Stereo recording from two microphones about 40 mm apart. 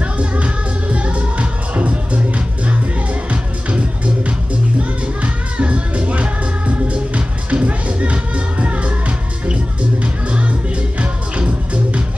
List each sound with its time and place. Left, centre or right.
0.9 s music: right
5.2 s music: right
11.0 s music: right